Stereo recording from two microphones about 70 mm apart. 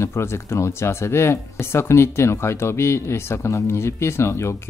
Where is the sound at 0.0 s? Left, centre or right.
Left.